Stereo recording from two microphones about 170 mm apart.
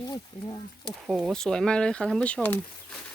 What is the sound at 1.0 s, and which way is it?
Speech, 5° right (ahead or behind).